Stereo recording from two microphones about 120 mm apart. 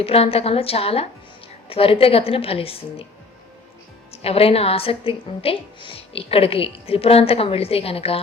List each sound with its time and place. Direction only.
0.0 s a woman's voice: 55° left (ahead or behind)
4.1 s a woman's voice: 55° left (ahead or behind)